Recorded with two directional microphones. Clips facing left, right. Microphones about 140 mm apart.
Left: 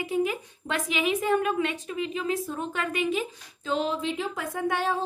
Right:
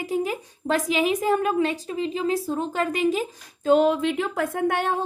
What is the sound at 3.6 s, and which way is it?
Speech, 55° right (ahead or behind).